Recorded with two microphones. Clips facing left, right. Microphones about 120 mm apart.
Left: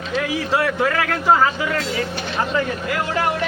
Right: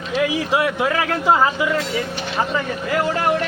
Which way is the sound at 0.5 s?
15° right (ahead or behind).